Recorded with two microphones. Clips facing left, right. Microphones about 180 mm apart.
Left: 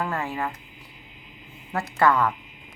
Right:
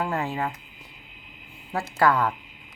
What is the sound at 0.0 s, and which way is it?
Speech, 15° right (ahead or behind).